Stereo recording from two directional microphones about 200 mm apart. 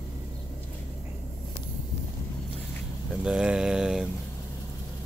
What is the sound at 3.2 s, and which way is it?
Mantra, 5° right (ahead or behind).